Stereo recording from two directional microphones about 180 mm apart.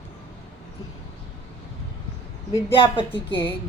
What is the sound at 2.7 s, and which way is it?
Speech, 30° left (ahead or behind).